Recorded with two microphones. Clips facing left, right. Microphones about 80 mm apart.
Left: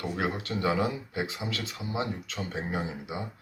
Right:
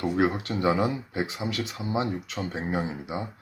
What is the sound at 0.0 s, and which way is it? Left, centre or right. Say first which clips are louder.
Speech: right 6 dB; right.